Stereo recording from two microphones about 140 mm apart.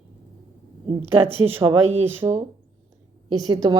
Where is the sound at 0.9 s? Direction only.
40° right (ahead or behind).